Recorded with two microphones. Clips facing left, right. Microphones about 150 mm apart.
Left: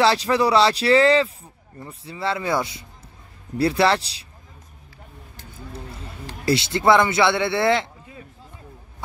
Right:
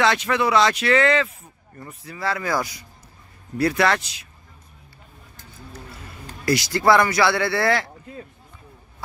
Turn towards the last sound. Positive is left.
turn(degrees=20)  # may be behind; listen again after turning